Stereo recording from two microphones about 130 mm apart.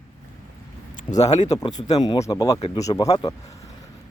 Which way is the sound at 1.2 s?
60° left (ahead or behind).